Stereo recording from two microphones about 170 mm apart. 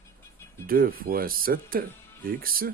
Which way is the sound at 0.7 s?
60° right (ahead or behind).